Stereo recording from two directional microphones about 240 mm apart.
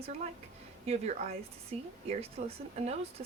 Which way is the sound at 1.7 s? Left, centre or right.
Right.